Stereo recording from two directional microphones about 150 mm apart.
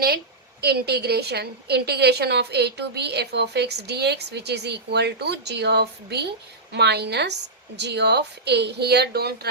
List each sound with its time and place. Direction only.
0.6 s a woman's voice: 90° right